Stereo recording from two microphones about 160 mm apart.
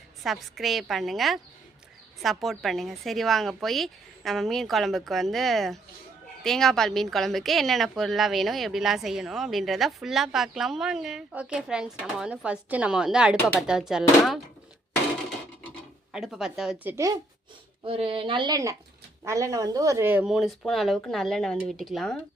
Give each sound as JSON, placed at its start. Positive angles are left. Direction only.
{"t": 0.2, "sound": "a woman's voice", "side_deg": 0}
{"t": 16.1, "sound": "a woman's voice", "side_deg": -5}
{"t": 16.8, "sound": "speech", "side_deg": -20}
{"t": 17.8, "sound": "a woman's voice", "side_deg": -35}